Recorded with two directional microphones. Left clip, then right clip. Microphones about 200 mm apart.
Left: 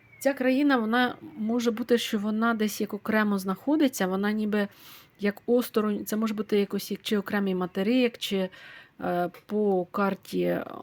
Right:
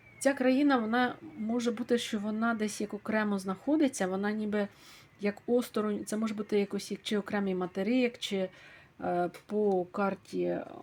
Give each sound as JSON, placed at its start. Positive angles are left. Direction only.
{"t": 0.2, "sound": "speech", "side_deg": 10}